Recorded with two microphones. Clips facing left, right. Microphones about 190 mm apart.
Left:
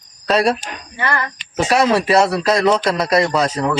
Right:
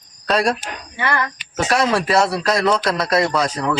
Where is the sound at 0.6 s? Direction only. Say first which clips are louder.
Left 1 dB; 5° right (ahead or behind).